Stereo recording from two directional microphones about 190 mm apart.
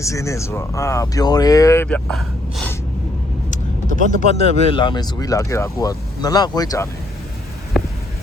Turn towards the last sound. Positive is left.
turn(degrees=0)  # may be behind; listen again after turning